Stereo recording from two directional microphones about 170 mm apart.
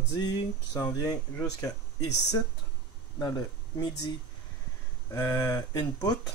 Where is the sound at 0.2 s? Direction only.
25° left (ahead or behind).